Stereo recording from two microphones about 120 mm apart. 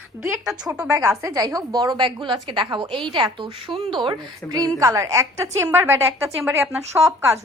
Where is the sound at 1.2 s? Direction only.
30° right (ahead or behind).